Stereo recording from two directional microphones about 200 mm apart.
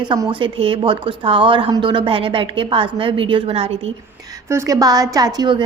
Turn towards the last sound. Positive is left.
turn(degrees=-20)  # may be behind; listen again after turning